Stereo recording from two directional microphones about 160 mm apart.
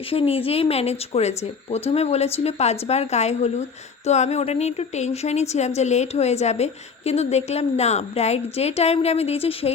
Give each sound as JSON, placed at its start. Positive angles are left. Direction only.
{"t": 0.1, "sound": "a woman's voice", "side_deg": 35}